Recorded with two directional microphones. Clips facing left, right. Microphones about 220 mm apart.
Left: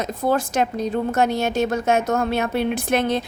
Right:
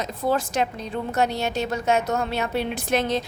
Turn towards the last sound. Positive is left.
turn(degrees=55)  # may be behind; listen again after turning